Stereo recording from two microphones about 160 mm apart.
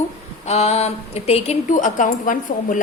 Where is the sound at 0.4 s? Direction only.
40° left (ahead or behind).